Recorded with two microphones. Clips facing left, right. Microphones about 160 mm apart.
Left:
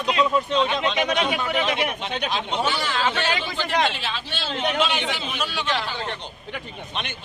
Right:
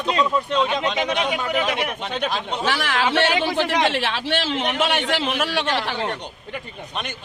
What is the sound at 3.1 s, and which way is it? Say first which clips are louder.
A man's voice: right 6 dB; 80° right.